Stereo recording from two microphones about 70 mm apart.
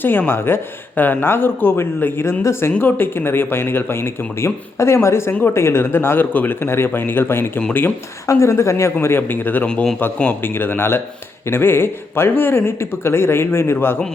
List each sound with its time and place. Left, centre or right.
0.0 s speech: left
5.3 s speech: left
5.5 s speech: left
8.3 s speech: left
9.6 s a man's voice: centre
10.2 s speech: left